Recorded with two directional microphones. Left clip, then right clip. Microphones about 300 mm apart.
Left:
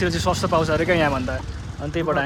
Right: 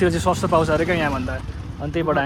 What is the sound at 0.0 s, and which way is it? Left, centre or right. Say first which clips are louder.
Speech: right 2 dB; centre.